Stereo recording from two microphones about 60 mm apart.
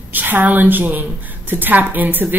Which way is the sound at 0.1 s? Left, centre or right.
Right.